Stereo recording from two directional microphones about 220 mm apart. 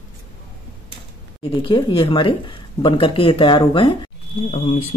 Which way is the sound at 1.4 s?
25° left (ahead or behind).